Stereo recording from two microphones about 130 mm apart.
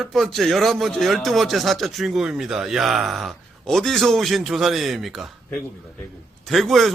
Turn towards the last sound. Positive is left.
turn(degrees=0)  # may be behind; listen again after turning